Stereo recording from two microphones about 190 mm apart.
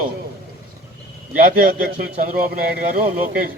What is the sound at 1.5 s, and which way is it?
Speech, 50° right (ahead or behind).